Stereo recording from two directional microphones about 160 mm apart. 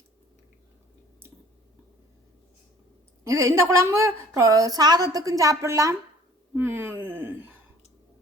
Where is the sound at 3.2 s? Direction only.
20° right (ahead or behind).